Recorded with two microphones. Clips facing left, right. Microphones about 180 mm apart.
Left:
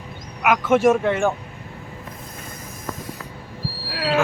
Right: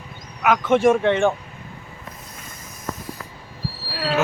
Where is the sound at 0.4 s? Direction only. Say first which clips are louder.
Even; 5° left (ahead or behind).